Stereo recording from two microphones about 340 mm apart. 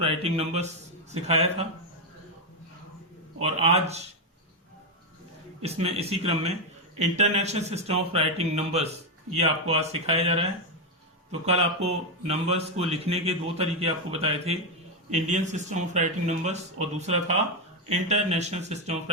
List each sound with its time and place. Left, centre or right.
0.0 s speech: centre
3.4 s speech: centre
5.6 s speech: centre